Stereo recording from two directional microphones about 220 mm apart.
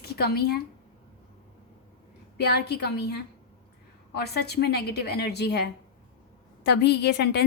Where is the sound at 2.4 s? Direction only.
50° left (ahead or behind).